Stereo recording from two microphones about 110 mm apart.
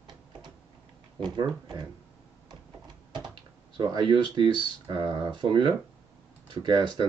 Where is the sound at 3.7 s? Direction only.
45° right (ahead or behind).